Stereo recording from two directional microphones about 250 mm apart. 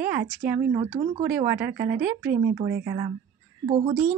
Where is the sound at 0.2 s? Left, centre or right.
Right.